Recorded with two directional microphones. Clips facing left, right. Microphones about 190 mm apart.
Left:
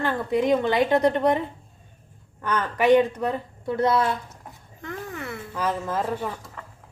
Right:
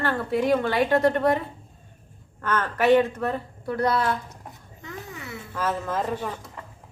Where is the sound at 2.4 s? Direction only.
10° left (ahead or behind).